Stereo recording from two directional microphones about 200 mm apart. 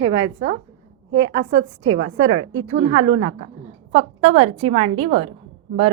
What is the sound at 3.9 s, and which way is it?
A woman's voice, 30° right (ahead or behind).